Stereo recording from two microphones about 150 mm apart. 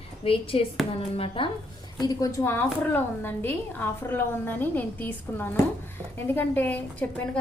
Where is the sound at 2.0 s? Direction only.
25° left (ahead or behind).